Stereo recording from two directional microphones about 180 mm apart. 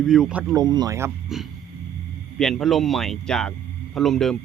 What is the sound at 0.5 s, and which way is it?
Speech, 20° right (ahead or behind).